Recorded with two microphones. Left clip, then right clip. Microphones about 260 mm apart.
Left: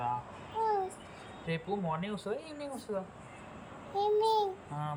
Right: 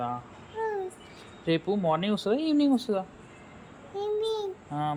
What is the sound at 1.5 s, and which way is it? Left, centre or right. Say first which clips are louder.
Speech: right 9 dB; right.